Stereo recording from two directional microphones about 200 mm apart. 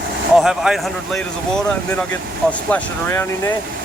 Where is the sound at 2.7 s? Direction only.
10° left (ahead or behind).